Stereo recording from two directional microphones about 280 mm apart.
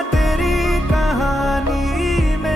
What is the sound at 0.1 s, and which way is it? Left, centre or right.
Music, centre.